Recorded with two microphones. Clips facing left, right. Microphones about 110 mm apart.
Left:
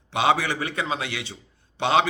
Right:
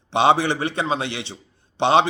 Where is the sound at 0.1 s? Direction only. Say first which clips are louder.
Right 4 dB; 25° right (ahead or behind).